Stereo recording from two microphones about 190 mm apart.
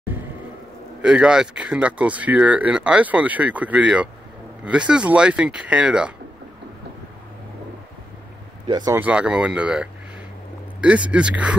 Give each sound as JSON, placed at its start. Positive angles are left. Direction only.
{"t": 1.0, "sound": "speech", "side_deg": -5}
{"t": 8.6, "sound": "speech", "side_deg": -25}
{"t": 8.9, "sound": "speech", "side_deg": -5}